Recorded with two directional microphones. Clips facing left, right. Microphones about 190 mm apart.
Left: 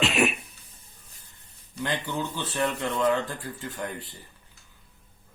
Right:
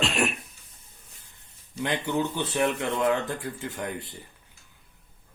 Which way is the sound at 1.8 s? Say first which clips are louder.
Right 3 dB; 15° right (ahead or behind).